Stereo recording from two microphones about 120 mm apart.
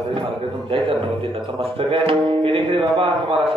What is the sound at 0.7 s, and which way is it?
Speech, 45° right (ahead or behind).